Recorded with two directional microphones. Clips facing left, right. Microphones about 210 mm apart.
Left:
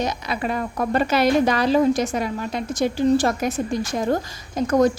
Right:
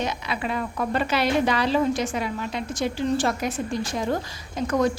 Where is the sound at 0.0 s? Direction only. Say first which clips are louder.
Left 3 dB; 40° left (ahead or behind).